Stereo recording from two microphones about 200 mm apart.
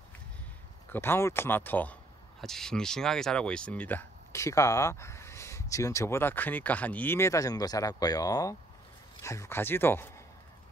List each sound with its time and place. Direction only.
0.9 s speech: 10° left (ahead or behind)